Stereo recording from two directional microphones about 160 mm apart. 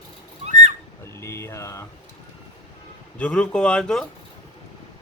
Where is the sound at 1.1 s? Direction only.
20° left (ahead or behind).